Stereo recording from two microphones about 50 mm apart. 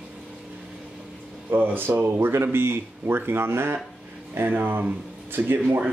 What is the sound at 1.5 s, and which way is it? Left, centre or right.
Speech, right.